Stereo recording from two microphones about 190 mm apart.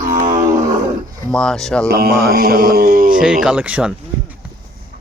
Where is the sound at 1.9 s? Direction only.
55° right (ahead or behind).